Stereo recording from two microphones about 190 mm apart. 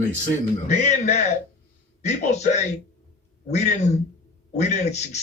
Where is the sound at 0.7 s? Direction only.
40° left (ahead or behind).